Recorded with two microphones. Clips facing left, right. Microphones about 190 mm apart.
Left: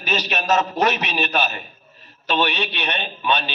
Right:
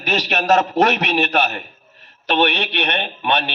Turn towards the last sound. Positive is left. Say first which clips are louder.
# right 2 dB
turn(degrees=-65)  # may be behind; listen again after turning